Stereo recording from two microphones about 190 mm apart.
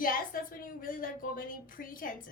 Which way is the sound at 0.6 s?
45° left (ahead or behind).